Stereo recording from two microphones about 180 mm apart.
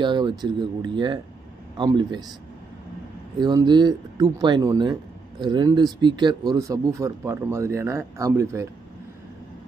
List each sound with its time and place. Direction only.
0.0 s speech: 25° right (ahead or behind)
3.3 s speech: 25° right (ahead or behind)